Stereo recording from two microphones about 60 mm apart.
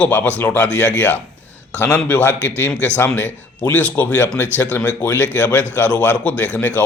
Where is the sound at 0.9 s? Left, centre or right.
Left.